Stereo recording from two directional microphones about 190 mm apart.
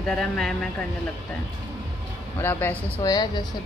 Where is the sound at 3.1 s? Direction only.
20° left (ahead or behind).